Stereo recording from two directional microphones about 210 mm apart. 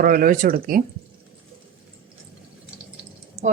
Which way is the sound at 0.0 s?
45° right (ahead or behind).